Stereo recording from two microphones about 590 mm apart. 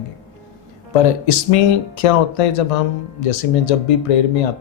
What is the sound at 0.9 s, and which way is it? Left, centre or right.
Speech, left.